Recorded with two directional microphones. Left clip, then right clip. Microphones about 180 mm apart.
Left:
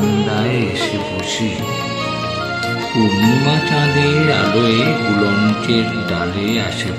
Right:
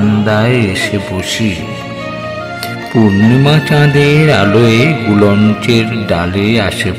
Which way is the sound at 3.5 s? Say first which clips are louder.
Right 5 dB; 45° right (ahead or behind).